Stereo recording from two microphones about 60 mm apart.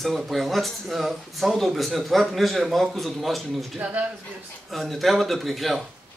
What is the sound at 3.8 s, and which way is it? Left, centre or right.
Speech, right.